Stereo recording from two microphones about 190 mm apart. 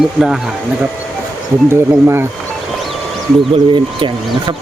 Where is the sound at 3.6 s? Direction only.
25° right (ahead or behind).